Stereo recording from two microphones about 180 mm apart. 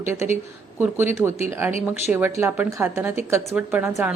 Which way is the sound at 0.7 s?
10° right (ahead or behind).